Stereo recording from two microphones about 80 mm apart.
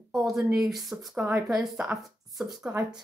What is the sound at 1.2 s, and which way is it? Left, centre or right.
Speech, right.